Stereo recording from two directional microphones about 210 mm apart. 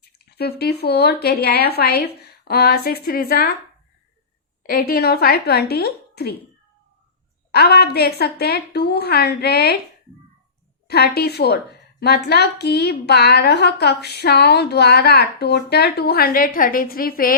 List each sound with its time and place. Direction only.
0.0 s a woman's voice: 50° left (ahead or behind)
4.6 s a woman's voice: 45° left (ahead or behind)
7.5 s a woman's voice: 50° left (ahead or behind)
10.8 s a woman's voice: 50° left (ahead or behind)